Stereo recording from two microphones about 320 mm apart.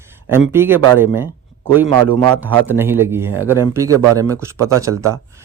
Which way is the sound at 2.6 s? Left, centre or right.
Centre.